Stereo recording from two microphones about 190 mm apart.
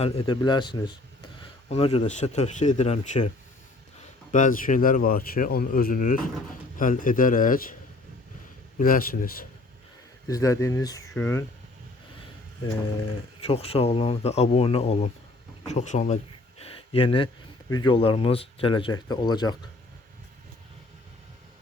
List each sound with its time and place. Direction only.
0.0 s speech: 25° left (ahead or behind); by 7.8 s 45° left (ahead or behind)
8.8 s speech: 50° left (ahead or behind)
10.2 s speech: 20° left (ahead or behind)
13.4 s speech: 30° left (ahead or behind)
15.6 s a sound: 35° left (ahead or behind)
17.7 s speech: 20° left (ahead or behind)